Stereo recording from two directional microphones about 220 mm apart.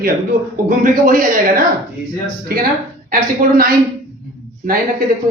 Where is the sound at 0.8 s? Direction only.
40° right (ahead or behind).